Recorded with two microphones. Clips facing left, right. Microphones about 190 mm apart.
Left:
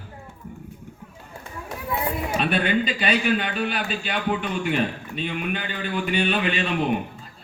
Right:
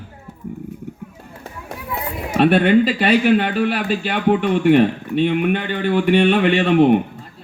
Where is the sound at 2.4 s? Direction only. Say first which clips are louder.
Right 11 dB; 65° right (ahead or behind).